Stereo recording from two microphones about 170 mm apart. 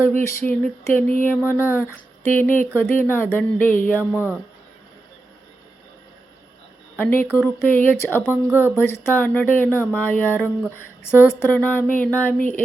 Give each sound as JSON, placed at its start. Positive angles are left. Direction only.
{"t": 0.0, "sound": "speech", "side_deg": 15}
{"t": 7.0, "sound": "speech", "side_deg": 10}
{"t": 8.4, "sound": "speech", "side_deg": -15}
{"t": 8.7, "sound": "speech", "side_deg": 15}